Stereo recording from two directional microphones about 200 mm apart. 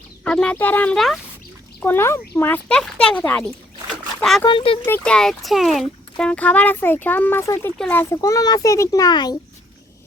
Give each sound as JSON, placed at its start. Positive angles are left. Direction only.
{"t": 0.3, "sound": "speech", "side_deg": 5}
{"t": 4.4, "sound": "speech", "side_deg": 25}
{"t": 4.9, "sound": "speech", "side_deg": 5}